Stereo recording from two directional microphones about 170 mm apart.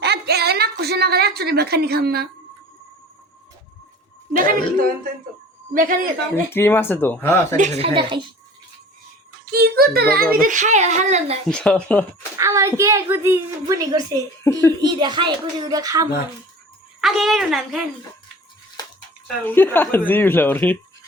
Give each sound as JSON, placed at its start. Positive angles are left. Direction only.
{"t": 0.0, "sound": "a sound", "side_deg": -70}
{"t": 4.3, "sound": "speech", "side_deg": -55}
{"t": 6.3, "sound": "speech", "side_deg": 15}
{"t": 7.5, "sound": "speech", "side_deg": -45}
{"t": 9.5, "sound": "speech", "side_deg": -65}
{"t": 10.3, "sound": "speech", "side_deg": -50}
{"t": 11.4, "sound": "a woman's voice", "side_deg": 5}
{"t": 12.4, "sound": "a woman's voice", "side_deg": -15}
{"t": 17.0, "sound": "a woman's voice", "side_deg": 0}
{"t": 19.5, "sound": "speech", "side_deg": 10}